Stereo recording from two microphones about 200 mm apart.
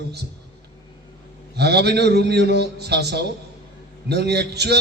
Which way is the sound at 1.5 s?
55° right (ahead or behind).